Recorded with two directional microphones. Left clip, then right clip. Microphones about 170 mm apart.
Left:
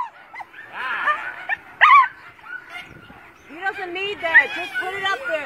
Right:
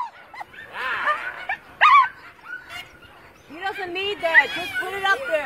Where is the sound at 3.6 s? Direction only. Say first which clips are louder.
Left 1 dB; 15° left (ahead or behind).